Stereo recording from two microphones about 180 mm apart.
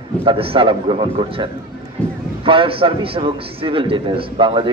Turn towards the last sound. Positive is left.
turn(degrees=-30)  # may be behind; listen again after turning